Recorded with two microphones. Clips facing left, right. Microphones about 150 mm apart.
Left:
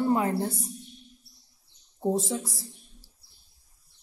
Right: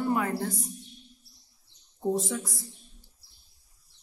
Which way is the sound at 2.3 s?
30° left (ahead or behind).